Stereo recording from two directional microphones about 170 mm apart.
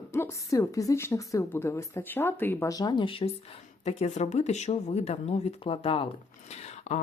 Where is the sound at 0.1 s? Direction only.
15° left (ahead or behind).